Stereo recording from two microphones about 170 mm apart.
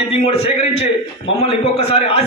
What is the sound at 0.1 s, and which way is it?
A man's voice, 35° left (ahead or behind).